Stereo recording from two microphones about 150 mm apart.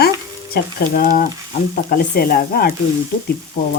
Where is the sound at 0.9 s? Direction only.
75° left (ahead or behind).